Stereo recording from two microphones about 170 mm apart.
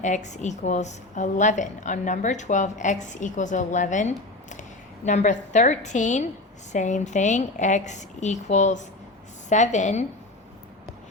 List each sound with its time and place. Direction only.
0.0 s a woman's voice: 45° left (ahead or behind)